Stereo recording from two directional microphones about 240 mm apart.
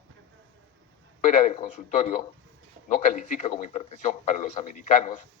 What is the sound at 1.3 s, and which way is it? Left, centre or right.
A man's voice, left.